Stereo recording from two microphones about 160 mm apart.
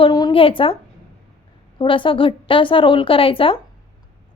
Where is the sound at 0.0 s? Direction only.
30° left (ahead or behind).